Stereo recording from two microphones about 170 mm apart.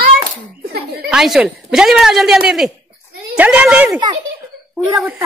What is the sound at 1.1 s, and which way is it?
A woman's voice, 5° right (ahead or behind).